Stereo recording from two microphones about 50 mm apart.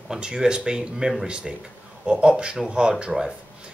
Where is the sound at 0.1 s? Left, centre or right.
Centre.